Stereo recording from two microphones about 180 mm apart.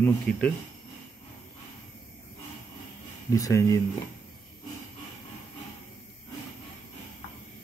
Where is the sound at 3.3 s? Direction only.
15° left (ahead or behind).